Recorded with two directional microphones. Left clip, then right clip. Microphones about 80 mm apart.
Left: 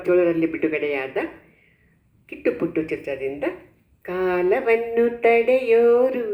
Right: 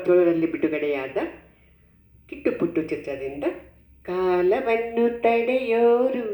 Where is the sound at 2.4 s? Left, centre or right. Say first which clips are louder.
Left 1 dB; right.